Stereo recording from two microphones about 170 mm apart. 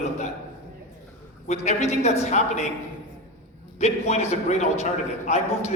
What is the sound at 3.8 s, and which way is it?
A man's voice, 40° left (ahead or behind).